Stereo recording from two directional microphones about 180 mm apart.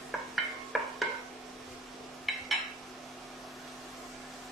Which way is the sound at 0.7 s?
Centre (ahead or behind).